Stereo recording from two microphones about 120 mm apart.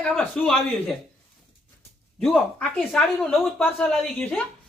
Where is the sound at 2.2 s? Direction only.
5° left (ahead or behind).